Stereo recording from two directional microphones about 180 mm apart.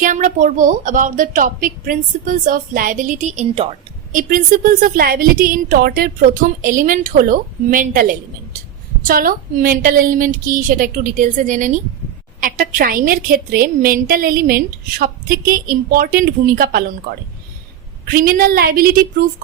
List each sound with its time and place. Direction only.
0.0 s a woman's voice: 45° right (ahead or behind)
4.1 s a woman's voice: 50° right (ahead or behind)
18.0 s a woman's voice: 50° right (ahead or behind)